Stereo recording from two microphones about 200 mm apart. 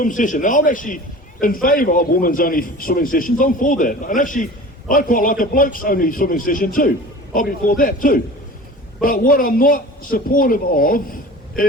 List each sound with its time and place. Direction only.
0.0 s a man's voice: 40° left (ahead or behind)